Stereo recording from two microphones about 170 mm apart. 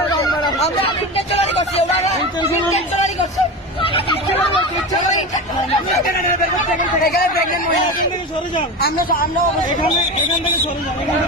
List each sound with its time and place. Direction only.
1.1 s speech: 35° left (ahead or behind)
6.1 s speech: 65° left (ahead or behind)
8.5 s speech: 60° left (ahead or behind)